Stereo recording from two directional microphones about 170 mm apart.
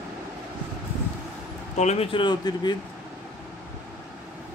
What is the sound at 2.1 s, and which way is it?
Speech, 25° left (ahead or behind).